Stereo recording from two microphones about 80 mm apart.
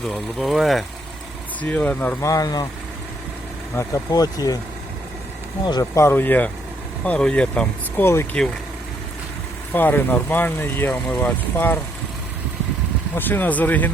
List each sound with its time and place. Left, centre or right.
0.1 s speech: centre
1.6 s speech: centre
2.2 s speech: left
4.1 s speech: left
5.8 s speech: left; by 8.0 s centre
8.0 s speech: left
9.7 s speech: left
13.1 s speech: left